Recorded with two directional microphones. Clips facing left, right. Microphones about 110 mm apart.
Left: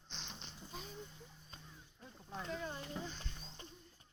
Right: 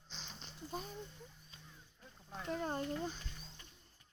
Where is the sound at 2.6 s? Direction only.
50° right (ahead or behind).